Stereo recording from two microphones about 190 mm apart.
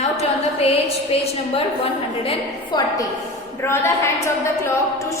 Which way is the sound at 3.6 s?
15° left (ahead or behind).